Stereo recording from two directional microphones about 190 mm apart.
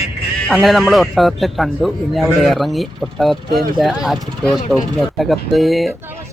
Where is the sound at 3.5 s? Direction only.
55° right (ahead or behind).